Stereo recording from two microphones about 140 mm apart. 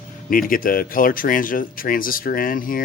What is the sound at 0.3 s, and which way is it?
Speech, 80° left.